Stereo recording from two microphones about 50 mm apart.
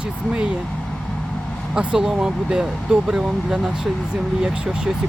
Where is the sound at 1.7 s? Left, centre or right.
Centre.